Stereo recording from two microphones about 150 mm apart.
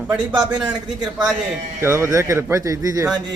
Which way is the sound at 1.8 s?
15° right (ahead or behind).